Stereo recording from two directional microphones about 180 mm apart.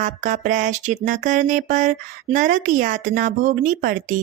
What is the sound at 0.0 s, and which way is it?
Speech, 45° right (ahead or behind).